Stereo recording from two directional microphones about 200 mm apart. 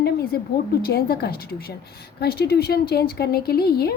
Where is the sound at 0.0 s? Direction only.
50° left (ahead or behind).